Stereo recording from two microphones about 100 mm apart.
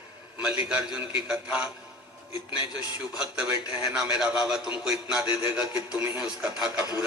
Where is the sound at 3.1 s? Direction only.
10° right (ahead or behind).